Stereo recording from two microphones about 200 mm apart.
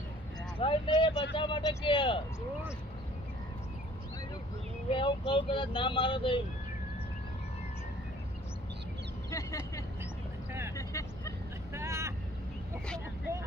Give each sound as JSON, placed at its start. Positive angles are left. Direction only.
{"t": 0.6, "sound": "speech", "side_deg": 25}
{"t": 4.9, "sound": "speech", "side_deg": 25}
{"t": 9.3, "sound": "speech", "side_deg": 15}
{"t": 10.8, "sound": "vehicle", "side_deg": 15}
{"t": 11.7, "sound": "vehicle", "side_deg": -15}